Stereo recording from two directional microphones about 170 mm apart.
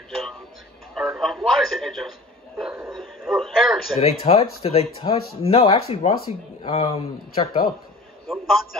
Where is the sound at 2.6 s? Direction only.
5° right (ahead or behind).